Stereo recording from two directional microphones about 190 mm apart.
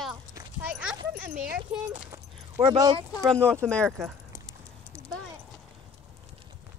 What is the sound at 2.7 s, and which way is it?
Speech, 25° right (ahead or behind).